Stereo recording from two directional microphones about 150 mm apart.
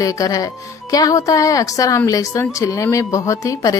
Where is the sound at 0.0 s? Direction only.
20° left (ahead or behind).